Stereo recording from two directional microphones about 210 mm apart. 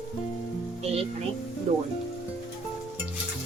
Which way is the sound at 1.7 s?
35° right (ahead or behind).